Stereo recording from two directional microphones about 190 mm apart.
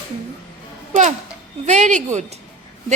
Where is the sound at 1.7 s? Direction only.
40° right (ahead or behind).